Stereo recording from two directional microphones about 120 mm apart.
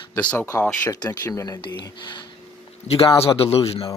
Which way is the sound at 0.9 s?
30° left (ahead or behind).